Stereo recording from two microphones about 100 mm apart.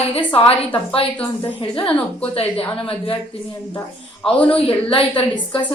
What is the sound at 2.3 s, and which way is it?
Speech, 75° left (ahead or behind).